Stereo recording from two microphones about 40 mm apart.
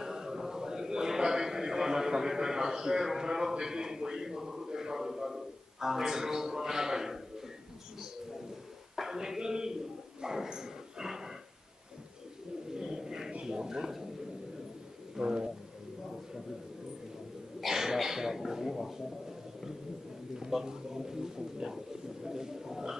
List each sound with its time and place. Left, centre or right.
0.0 s a sound: centre
8.9 s a sound: centre
10.2 s dog: centre
12.7 s bird: centre
13.3 s a sound: right
15.1 s bird: centre
17.6 s throat clearing: centre
20.3 s a man's voice: centre
22.2 s bird: centre